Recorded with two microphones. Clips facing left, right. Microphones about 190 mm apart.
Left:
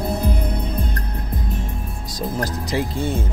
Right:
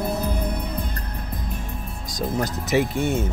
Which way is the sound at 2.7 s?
25° right (ahead or behind).